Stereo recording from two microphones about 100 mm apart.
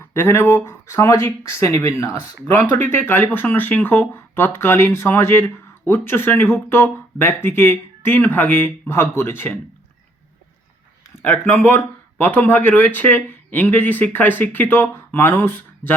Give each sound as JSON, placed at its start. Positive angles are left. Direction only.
{"t": 0.0, "sound": "speech", "side_deg": 25}
{"t": 11.2, "sound": "speech", "side_deg": 25}